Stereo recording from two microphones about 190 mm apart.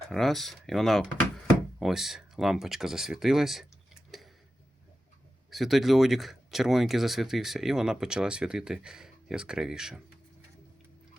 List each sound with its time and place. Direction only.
0.1 s speech: centre (ahead or behind)
5.5 s speech: centre (ahead or behind)